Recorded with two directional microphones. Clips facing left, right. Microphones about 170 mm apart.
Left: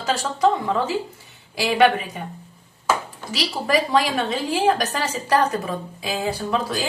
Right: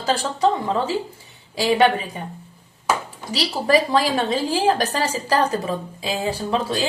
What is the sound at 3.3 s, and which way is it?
A woman's voice, 35° right (ahead or behind).